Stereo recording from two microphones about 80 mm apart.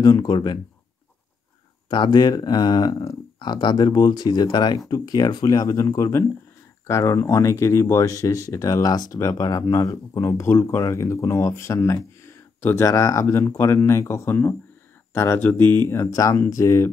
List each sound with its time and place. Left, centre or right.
0.0 s speech: left
1.9 s speech: left
3.3 s speech: left
4.7 s speech: left
15.9 s speech: left